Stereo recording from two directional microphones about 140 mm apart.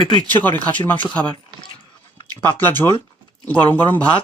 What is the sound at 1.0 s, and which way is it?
Speech, 35° left (ahead or behind).